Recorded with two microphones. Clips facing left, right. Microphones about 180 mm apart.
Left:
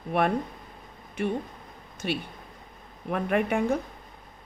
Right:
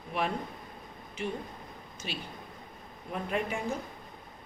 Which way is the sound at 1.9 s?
60° left (ahead or behind).